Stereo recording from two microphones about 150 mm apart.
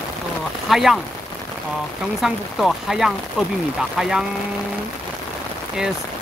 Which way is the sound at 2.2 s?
5° right (ahead or behind).